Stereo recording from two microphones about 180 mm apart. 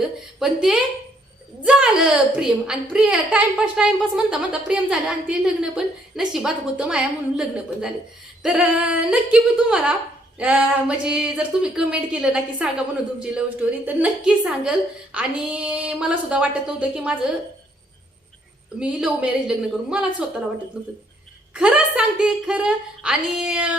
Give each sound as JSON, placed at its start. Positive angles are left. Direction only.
{"t": 0.3, "sound": "a woman's voice", "side_deg": -5}
{"t": 18.8, "sound": "a woman's voice", "side_deg": -5}